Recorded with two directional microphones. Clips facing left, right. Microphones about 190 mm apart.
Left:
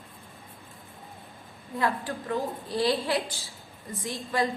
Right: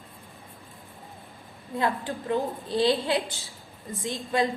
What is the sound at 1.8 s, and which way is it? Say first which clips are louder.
A woman's voice: right 1 dB; 25° right (ahead or behind).